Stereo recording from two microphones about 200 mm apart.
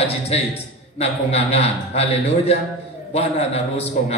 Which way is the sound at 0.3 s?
30° left (ahead or behind).